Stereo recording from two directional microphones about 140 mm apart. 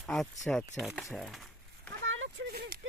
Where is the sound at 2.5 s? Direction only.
90° right.